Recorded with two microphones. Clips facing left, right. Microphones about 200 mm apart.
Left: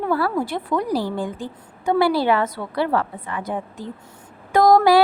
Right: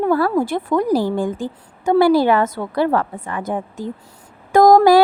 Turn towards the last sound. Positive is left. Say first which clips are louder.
# right 4 dB
turn(degrees=-45)  # may be behind; listen again after turning